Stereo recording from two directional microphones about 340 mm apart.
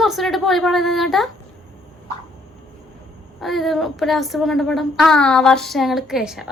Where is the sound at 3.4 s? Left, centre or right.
Centre.